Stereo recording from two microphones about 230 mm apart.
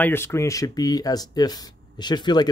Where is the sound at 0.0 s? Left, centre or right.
Centre.